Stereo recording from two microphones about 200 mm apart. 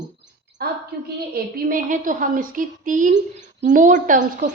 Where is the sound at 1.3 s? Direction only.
45° right (ahead or behind).